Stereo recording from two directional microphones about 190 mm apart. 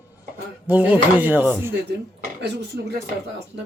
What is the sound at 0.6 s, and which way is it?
A man's voice, 10° right (ahead or behind).